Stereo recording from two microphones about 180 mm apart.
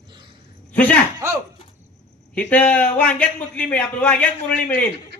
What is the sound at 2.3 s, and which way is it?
A man's voice, 5° left (ahead or behind).